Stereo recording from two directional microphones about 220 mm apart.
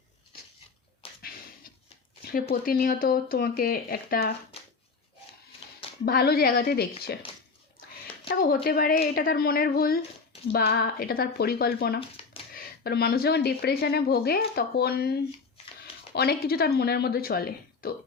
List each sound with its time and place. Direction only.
1.0 s a sound: 25° left (ahead or behind)
2.3 s speech: 40° left (ahead or behind)
6.1 s speech: 45° left (ahead or behind)
8.3 s speech: 45° left (ahead or behind)
11.9 s a sound: 25° left (ahead or behind)
12.5 s speech: 45° left (ahead or behind)